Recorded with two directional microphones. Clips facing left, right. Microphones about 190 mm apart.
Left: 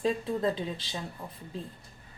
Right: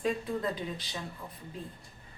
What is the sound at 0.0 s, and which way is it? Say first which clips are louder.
Speech: left 3 dB; 25° left (ahead or behind).